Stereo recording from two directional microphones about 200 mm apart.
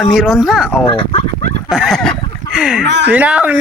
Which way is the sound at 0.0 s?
Centre (ahead or behind).